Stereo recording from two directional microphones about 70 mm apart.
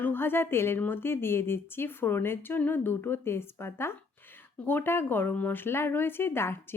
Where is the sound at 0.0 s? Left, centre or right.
Left.